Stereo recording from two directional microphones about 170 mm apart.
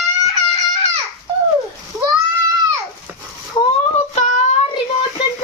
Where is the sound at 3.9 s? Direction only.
40° left (ahead or behind).